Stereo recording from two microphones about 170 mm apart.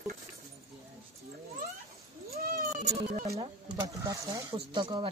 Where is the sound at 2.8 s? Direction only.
40° right (ahead or behind).